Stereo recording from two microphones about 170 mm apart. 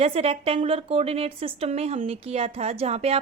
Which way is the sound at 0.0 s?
35° right (ahead or behind).